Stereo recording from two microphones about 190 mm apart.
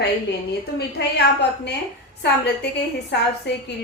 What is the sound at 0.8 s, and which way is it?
Speech, 60° left (ahead or behind).